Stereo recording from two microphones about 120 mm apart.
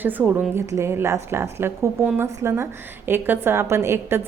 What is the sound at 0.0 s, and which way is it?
A woman's voice, 15° right (ahead or behind).